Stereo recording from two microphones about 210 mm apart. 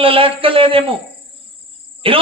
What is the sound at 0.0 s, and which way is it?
Speech, 25° right (ahead or behind).